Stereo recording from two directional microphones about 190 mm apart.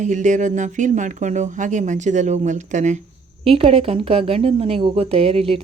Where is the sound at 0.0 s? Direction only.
40° right (ahead or behind).